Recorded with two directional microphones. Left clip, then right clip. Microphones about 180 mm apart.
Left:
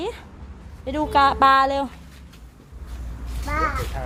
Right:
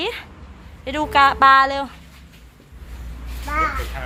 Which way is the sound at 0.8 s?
20° left (ahead or behind).